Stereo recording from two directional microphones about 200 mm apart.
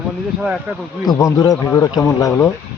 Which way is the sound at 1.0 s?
20° left (ahead or behind).